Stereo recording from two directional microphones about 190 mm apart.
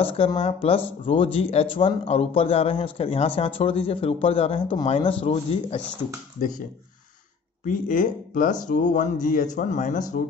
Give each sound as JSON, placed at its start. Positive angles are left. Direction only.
{"t": 0.0, "sound": "a man's voice", "side_deg": 30}
{"t": 7.6, "sound": "speech", "side_deg": 45}